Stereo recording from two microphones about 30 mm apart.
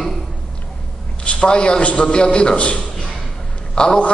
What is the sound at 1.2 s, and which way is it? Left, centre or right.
A woman's voice, left.